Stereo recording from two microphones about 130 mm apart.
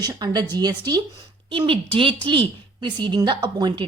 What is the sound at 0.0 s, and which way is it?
A woman's voice, 30° right (ahead or behind).